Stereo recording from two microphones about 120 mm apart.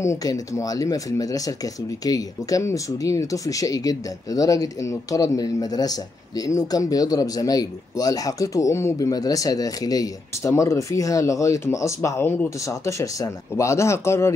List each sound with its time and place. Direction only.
0.0 s speech: 30° left (ahead or behind)